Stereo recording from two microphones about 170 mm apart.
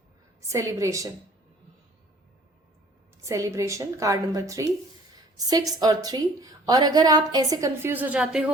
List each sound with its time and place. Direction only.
0.4 s a woman's voice: 15° right (ahead or behind)
3.2 s a woman's voice: 20° right (ahead or behind)